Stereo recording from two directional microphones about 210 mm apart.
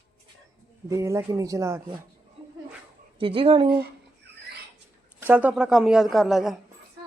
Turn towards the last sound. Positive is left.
turn(degrees=0)  # may be behind; listen again after turning